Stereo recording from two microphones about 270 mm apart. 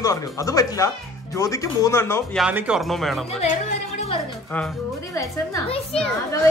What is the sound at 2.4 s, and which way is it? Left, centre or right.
Speech, centre.